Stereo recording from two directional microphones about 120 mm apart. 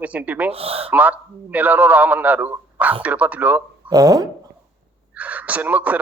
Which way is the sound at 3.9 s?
30° right (ahead or behind).